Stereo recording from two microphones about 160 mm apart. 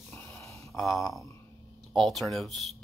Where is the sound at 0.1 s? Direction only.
15° left (ahead or behind).